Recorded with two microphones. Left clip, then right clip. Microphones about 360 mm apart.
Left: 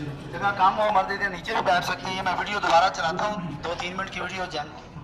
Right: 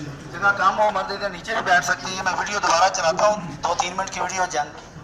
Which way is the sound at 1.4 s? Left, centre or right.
Centre.